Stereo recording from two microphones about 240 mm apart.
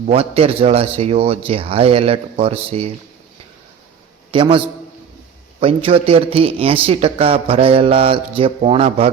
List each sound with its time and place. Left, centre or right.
0.1 s a man's voice: right
4.3 s a man's voice: right